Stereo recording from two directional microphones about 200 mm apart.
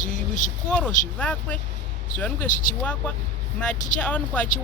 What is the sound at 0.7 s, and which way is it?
Speech, 5° left (ahead or behind).